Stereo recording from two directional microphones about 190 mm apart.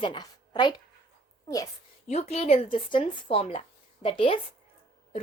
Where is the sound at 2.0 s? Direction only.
35° left (ahead or behind).